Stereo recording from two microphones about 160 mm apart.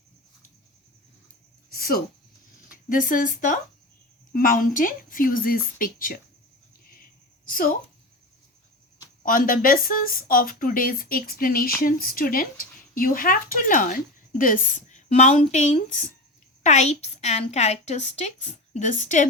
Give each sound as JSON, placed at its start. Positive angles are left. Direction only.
{"t": 1.7, "sound": "a woman's voice", "side_deg": 65}
{"t": 6.8, "sound": "a sound", "side_deg": 65}
{"t": 9.2, "sound": "a woman's voice", "side_deg": 60}